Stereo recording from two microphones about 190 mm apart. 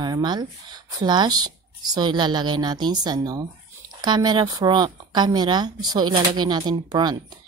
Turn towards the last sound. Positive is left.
turn(degrees=-20)  # may be behind; listen again after turning